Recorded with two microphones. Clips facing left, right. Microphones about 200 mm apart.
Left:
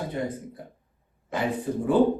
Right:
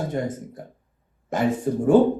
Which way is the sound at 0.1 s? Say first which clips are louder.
Right 3 dB; 45° right (ahead or behind).